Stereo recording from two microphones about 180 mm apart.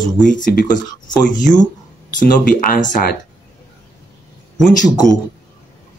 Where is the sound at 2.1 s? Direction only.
50° left (ahead or behind).